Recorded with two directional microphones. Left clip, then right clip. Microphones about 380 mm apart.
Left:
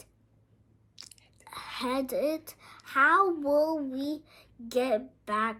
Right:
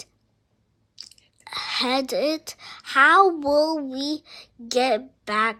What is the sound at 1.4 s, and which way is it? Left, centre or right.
A woman's voice, centre.